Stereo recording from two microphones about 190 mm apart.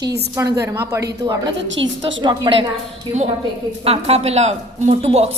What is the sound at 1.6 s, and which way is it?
Speech, 75° right (ahead or behind).